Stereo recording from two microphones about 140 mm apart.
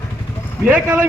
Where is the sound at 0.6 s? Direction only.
10° right (ahead or behind).